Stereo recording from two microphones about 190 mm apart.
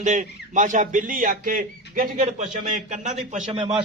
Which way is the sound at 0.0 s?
40° right (ahead or behind).